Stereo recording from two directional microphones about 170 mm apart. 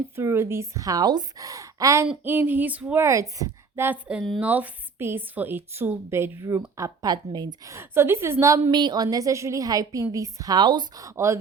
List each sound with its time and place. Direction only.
0.2 s a woman's voice: 15° right (ahead or behind)